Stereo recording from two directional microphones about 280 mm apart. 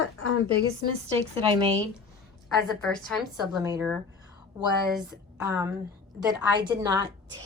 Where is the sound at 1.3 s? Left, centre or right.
Centre.